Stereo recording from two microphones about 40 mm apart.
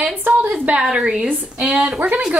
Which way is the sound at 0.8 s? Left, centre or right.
Right.